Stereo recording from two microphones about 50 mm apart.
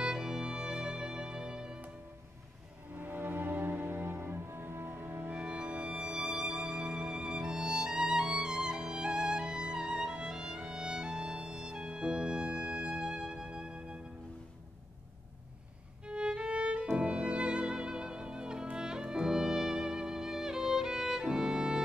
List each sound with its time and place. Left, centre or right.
0.0 s music: centre
2.9 s music: right
5.3 s music: right
16.1 s music: centre